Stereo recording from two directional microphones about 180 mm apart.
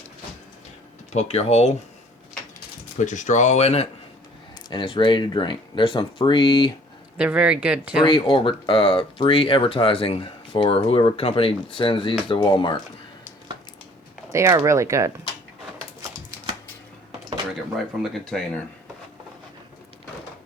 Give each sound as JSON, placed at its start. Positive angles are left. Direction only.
{"t": 1.1, "sound": "speech", "side_deg": 35}
{"t": 3.0, "sound": "speech", "side_deg": 45}
{"t": 7.2, "sound": "speech", "side_deg": -5}
{"t": 8.0, "sound": "speech", "side_deg": 25}
{"t": 14.3, "sound": "speech", "side_deg": -15}
{"t": 17.1, "sound": "a sound", "side_deg": -25}
{"t": 18.0, "sound": "speech", "side_deg": 5}